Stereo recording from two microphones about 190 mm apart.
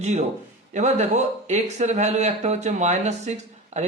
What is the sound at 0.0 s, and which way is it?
A man's voice, 35° right (ahead or behind).